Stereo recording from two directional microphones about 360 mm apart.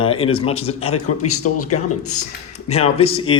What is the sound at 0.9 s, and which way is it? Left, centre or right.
Speech, left.